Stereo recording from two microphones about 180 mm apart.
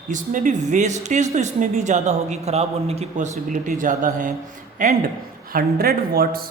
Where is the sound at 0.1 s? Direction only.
45° right (ahead or behind).